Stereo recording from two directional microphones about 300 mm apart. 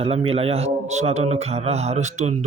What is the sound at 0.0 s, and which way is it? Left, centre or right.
A man's voice, centre.